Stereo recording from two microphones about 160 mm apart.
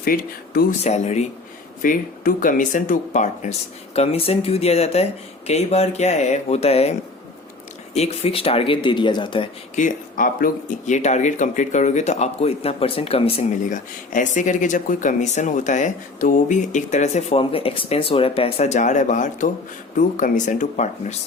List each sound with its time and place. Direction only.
0.0 s speech: 65° left (ahead or behind)
0.9 s speech: 45° left (ahead or behind)
1.8 s speech: 60° left (ahead or behind); by 6.9 s 40° left (ahead or behind)
7.9 s speech: 40° left (ahead or behind)
9.7 s speech: 55° left (ahead or behind); by 13.4 s 35° left (ahead or behind)
13.7 s speech: 55° left (ahead or behind)